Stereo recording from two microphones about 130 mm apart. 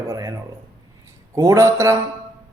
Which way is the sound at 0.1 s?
25° right (ahead or behind).